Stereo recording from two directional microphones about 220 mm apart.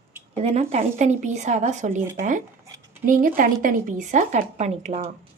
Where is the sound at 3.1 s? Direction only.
40° right (ahead or behind).